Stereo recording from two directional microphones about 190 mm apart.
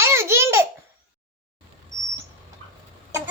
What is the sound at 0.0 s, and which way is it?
Baby laughter, 15° right (ahead or behind).